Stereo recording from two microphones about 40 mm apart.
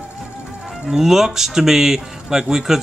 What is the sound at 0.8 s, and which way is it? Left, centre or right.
Speech, centre.